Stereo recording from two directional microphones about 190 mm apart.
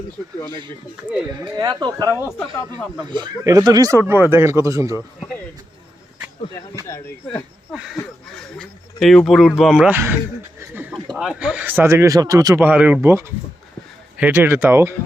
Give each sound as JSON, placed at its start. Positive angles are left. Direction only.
{"t": 1.3, "sound": "speech", "side_deg": -15}
{"t": 6.8, "sound": "speech", "side_deg": 15}
{"t": 8.0, "sound": "speech", "side_deg": 0}
{"t": 11.2, "sound": "speech", "side_deg": -5}